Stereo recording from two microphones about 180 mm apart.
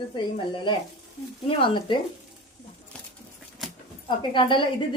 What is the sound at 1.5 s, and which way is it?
Speech, 25° left (ahead or behind).